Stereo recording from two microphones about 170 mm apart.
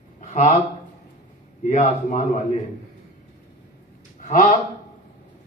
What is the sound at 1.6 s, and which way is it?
Speech, 45° left (ahead or behind).